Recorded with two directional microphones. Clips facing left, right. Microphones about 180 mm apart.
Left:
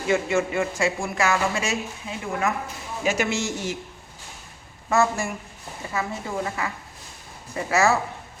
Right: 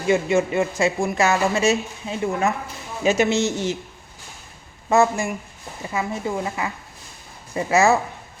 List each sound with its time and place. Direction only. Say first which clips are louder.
0.1 s speech: right 4 dB; 20° right (ahead or behind)
4.9 s a woman's voice: right 4 dB; 15° right (ahead or behind)